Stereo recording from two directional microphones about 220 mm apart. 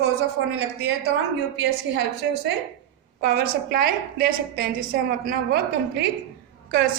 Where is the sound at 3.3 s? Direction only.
45° right (ahead or behind).